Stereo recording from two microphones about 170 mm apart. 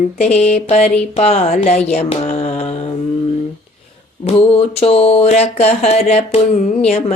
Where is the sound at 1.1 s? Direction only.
40° left (ahead or behind).